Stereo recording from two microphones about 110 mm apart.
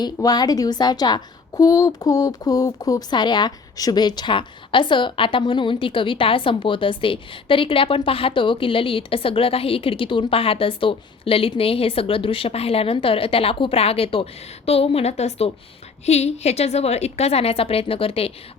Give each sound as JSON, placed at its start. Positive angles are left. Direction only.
{"t": 0.0, "sound": "a woman's voice", "side_deg": 40}